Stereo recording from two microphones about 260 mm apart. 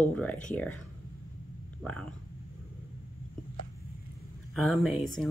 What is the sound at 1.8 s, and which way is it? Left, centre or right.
Speech, centre.